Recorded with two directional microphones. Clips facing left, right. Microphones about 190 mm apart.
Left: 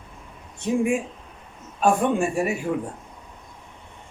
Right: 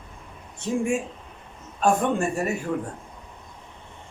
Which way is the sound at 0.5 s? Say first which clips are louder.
Left 2 dB; 15° left (ahead or behind).